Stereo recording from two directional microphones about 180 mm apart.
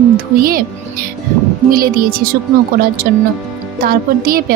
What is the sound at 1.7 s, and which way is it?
Speech, 55° right (ahead or behind).